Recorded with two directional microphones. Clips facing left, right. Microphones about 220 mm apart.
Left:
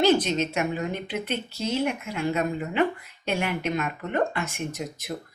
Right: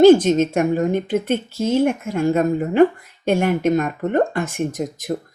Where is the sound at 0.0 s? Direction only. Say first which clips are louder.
Right 11 dB; 50° right (ahead or behind).